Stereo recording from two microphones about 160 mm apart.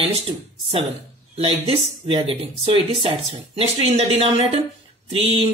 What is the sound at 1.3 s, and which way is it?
Speech, 35° right (ahead or behind).